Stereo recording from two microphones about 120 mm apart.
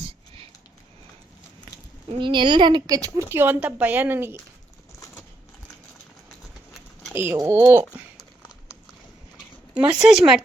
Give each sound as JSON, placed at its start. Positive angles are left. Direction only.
{"t": 2.1, "sound": "speech", "side_deg": -40}
{"t": 7.1, "sound": "speech", "side_deg": -20}
{"t": 8.4, "sound": "horse", "side_deg": -5}
{"t": 9.7, "sound": "speech", "side_deg": -10}